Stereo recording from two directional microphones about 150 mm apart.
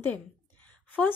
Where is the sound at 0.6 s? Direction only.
10° left (ahead or behind).